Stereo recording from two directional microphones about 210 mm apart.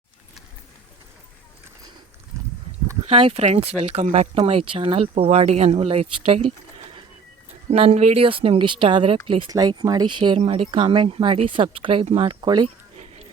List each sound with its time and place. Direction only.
3.1 s speech: 25° right (ahead or behind)
7.7 s speech: 30° right (ahead or behind)